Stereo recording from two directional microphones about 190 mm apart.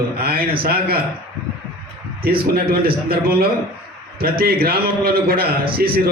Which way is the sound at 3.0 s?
55° right (ahead or behind).